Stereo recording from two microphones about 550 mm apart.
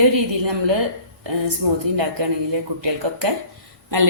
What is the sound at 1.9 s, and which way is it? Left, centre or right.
Speech, right.